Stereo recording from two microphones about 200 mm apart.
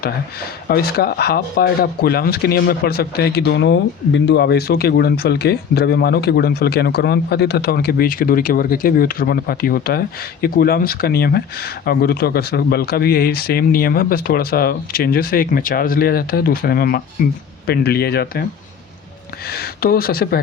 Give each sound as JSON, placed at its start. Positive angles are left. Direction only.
{"t": 0.0, "sound": "speech", "side_deg": 50}
{"t": 19.5, "sound": "speech", "side_deg": 50}